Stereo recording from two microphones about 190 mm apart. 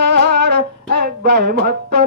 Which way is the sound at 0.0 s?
65° right (ahead or behind).